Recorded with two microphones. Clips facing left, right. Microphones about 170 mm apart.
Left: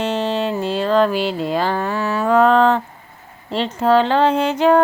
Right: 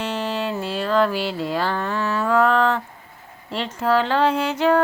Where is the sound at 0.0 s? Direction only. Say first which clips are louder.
Left 5 dB; 25° left (ahead or behind).